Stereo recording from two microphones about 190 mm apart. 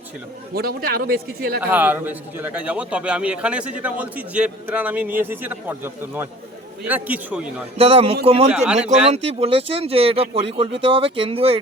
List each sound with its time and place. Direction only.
0.5 s speech: 50° right (ahead or behind)
1.6 s a man's voice: 10° right (ahead or behind)
7.8 s speech: 30° right (ahead or behind)
8.4 s speech: 5° right (ahead or behind)
9.0 s speech: 30° right (ahead or behind)